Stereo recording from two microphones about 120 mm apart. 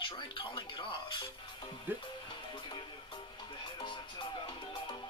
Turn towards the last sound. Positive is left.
turn(degrees=45)  # may be behind; listen again after turning